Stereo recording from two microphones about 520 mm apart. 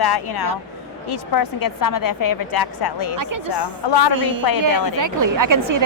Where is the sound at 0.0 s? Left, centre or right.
Left.